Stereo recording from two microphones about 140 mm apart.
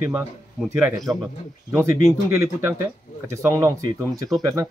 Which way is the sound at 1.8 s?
20° right (ahead or behind).